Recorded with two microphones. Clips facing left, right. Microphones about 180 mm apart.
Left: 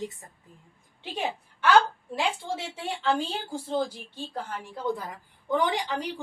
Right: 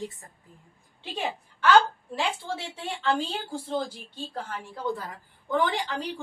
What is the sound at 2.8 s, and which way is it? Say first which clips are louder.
A woman's voice: even; 10° left (ahead or behind).